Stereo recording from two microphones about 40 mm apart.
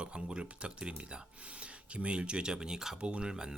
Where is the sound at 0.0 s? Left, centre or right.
Right.